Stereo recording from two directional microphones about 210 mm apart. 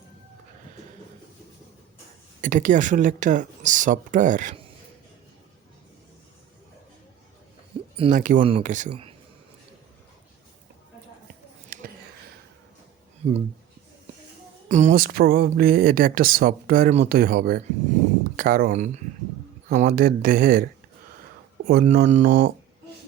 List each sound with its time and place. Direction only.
2.4 s speech: 40° right (ahead or behind)
7.9 s speech: 30° right (ahead or behind)
11.7 s a sound: 45° right (ahead or behind)
14.7 s speech: 35° right (ahead or behind)
21.7 s speech: 45° right (ahead or behind)
22.3 s speech: 55° right (ahead or behind)